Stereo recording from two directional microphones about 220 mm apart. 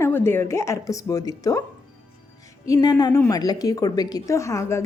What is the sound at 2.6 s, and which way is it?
A man's voice, 15° left (ahead or behind).